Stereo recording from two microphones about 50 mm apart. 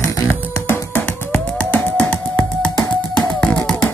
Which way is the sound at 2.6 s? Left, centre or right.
Left.